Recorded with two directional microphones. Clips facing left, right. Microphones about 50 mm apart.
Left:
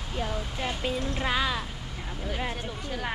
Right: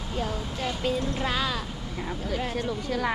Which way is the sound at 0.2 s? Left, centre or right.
Left.